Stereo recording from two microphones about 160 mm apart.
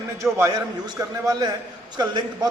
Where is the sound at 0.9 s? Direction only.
20° right (ahead or behind).